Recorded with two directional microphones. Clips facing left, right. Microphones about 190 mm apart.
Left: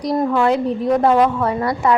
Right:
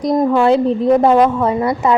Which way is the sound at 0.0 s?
20° right (ahead or behind).